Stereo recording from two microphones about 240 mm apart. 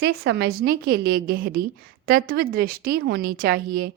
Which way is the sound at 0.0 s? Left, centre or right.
Right.